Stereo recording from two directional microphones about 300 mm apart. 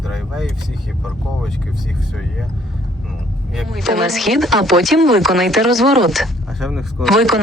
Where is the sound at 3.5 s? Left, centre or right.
Centre.